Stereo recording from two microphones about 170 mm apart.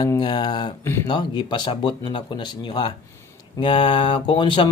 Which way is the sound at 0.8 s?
15° left (ahead or behind).